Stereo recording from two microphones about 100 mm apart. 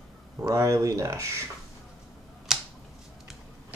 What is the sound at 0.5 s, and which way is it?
Speech, 30° right (ahead or behind).